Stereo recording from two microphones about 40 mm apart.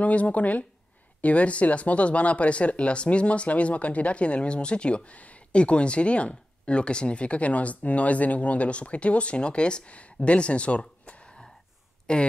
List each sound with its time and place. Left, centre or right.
0.0 s speech: left